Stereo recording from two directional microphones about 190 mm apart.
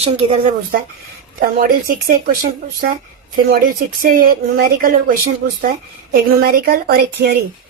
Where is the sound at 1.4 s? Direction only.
50° right (ahead or behind).